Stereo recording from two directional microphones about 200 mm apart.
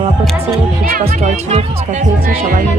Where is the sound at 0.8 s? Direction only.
45° right (ahead or behind).